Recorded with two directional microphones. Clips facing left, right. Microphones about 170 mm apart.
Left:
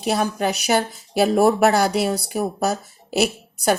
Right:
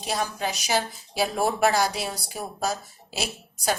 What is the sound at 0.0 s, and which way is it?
Speech, 60° left (ahead or behind).